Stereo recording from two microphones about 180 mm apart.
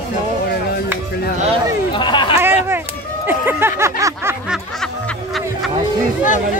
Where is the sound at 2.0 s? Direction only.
25° left (ahead or behind).